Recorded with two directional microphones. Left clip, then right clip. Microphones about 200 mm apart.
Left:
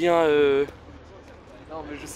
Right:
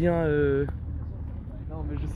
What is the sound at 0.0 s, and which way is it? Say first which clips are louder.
Speech: left 6 dB; 20° left (ahead or behind).